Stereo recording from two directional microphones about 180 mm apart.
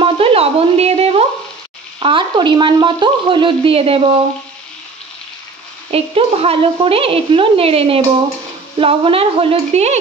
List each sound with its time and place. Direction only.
0.0 s a sound: 30° right (ahead or behind)
2.0 s speech: 25° right (ahead or behind)
5.9 s speech: 35° right (ahead or behind)